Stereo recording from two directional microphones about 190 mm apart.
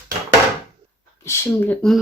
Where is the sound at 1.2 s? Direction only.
15° left (ahead or behind).